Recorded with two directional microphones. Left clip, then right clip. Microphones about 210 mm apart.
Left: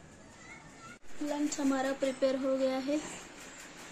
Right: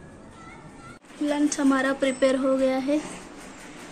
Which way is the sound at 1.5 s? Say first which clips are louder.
Right 8 dB; centre (ahead or behind).